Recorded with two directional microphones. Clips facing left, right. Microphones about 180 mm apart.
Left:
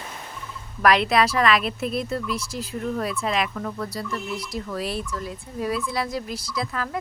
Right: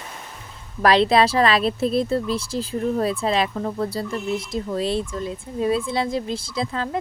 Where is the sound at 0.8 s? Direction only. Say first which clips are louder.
Right 3 dB; 30° right (ahead or behind).